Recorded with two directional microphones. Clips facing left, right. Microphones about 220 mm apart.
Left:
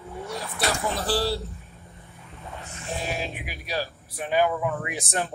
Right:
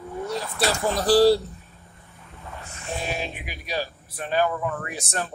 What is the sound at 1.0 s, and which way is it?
Speech, 40° right (ahead or behind).